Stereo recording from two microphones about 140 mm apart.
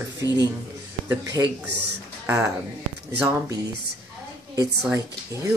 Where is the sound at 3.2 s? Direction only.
20° right (ahead or behind).